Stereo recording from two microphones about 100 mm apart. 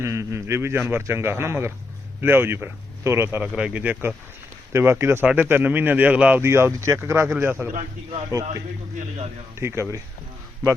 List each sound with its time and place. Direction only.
0.0 s a man's voice: 30° right (ahead or behind)
3.4 s speech: 10° right (ahead or behind)
4.7 s a man's voice: 25° right (ahead or behind)
6.4 s a man's voice: 25° right (ahead or behind)
9.6 s a man's voice: 25° right (ahead or behind)